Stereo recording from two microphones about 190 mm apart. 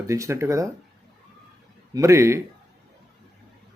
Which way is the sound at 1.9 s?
15° right (ahead or behind).